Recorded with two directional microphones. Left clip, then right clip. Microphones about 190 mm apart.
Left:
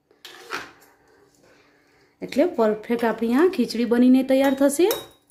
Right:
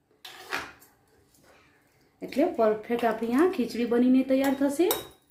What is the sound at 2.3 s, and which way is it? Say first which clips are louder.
Speech: left 4 dB; 45° left (ahead or behind).